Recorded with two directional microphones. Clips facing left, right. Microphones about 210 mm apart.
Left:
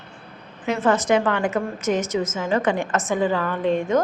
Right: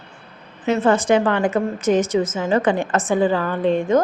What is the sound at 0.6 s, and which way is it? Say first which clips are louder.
A woman's voice: right 3 dB; 25° right (ahead or behind).